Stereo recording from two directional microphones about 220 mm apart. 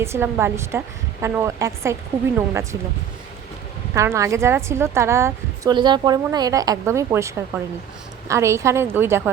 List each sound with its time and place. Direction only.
0.0 s a woman's voice: 10° right (ahead or behind)
3.9 s a woman's voice: 15° right (ahead or behind)